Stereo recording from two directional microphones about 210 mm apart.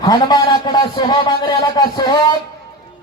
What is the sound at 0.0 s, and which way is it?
A man's voice, 20° left (ahead or behind).